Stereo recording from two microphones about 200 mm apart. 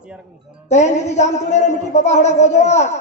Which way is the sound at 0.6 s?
35° left (ahead or behind).